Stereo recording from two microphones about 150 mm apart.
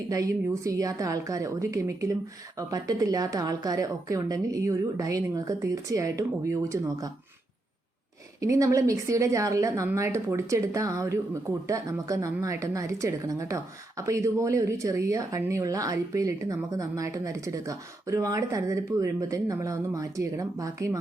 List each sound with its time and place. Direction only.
0.1 s a woman's voice: 20° right (ahead or behind)
8.4 s a woman's voice: 20° right (ahead or behind)